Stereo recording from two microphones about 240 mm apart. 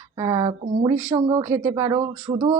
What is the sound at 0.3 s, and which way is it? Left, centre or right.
Speech, right.